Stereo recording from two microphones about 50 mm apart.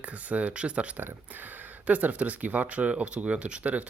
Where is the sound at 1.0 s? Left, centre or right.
Right.